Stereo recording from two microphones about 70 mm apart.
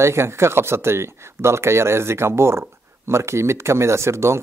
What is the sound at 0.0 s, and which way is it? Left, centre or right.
Speech, right.